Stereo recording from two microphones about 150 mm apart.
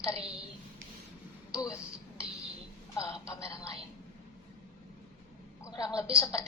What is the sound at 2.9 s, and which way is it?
Speech, 20° left (ahead or behind).